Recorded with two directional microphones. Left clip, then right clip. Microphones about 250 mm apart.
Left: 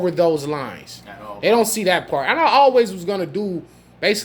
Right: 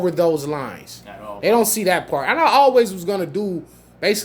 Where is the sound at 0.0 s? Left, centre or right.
Centre.